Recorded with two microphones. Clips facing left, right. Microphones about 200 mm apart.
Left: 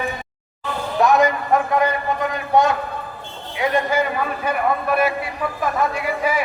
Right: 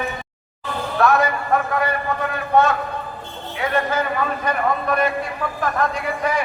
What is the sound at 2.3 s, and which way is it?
Speech, 15° left (ahead or behind).